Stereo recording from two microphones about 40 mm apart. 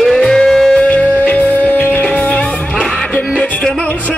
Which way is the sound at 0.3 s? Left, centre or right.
Centre.